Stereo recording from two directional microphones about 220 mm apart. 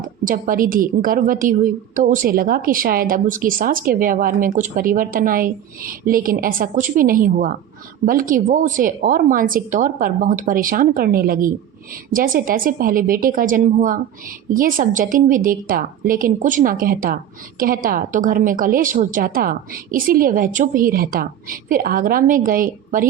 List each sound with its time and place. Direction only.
0.0 s a woman's voice: 40° right (ahead or behind)